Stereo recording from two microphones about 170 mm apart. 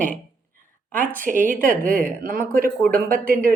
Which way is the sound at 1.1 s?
50° right (ahead or behind).